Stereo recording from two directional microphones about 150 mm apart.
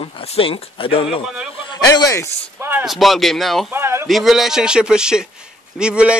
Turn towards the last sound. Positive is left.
turn(degrees=-5)  # may be behind; listen again after turning